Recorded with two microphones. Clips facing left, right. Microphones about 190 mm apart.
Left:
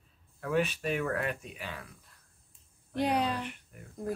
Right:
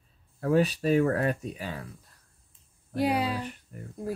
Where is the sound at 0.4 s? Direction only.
35° right (ahead or behind).